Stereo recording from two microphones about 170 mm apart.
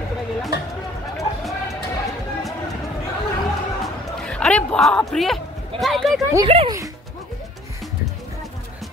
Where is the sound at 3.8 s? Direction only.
5° left (ahead or behind).